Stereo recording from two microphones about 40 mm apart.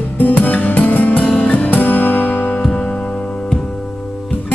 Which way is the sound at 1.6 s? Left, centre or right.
Left.